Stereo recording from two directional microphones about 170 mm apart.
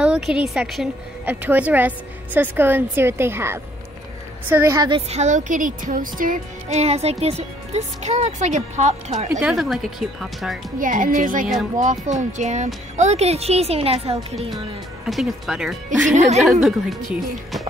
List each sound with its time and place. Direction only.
0.0 s a woman's voice: 5° right (ahead or behind)
4.7 s a woman's voice: 30° right (ahead or behind)
5.1 s speech: 45° right (ahead or behind)
9.4 s speech: centre (ahead or behind)
10.8 s speech: 50° right (ahead or behind)
15.0 s speech: centre (ahead or behind)
16.1 s speech: 45° right (ahead or behind)
16.6 s speech: centre (ahead or behind)